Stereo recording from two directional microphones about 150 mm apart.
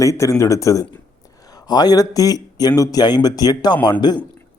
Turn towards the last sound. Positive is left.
turn(degrees=30)  # may be behind; listen again after turning